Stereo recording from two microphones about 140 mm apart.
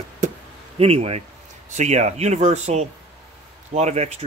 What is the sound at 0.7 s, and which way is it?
Speech, 45° right (ahead or behind).